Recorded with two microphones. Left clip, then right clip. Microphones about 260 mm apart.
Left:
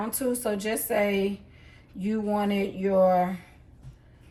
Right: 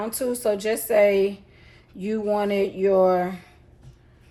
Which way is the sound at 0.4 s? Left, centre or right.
Right.